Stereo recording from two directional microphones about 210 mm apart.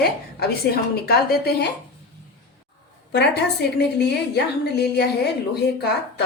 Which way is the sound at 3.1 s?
55° left (ahead or behind).